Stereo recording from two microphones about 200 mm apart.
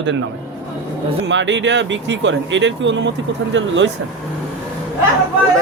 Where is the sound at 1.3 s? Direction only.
65° right (ahead or behind).